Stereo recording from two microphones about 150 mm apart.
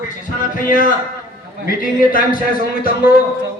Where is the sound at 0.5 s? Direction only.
60° left (ahead or behind).